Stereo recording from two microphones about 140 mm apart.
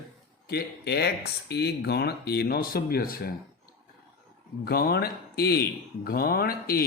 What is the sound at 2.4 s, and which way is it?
Speech, 90° left.